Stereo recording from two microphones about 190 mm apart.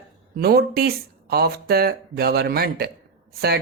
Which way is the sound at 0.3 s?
55° right (ahead or behind).